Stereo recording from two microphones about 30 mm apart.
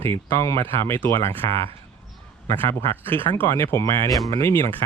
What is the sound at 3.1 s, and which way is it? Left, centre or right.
Speech, left.